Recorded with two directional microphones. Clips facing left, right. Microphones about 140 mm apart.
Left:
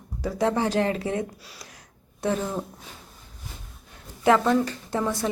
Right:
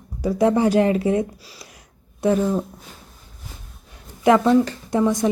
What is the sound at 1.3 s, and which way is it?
Speech, centre (ahead or behind).